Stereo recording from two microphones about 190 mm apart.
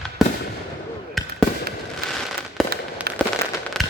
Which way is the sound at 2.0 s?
55° right (ahead or behind).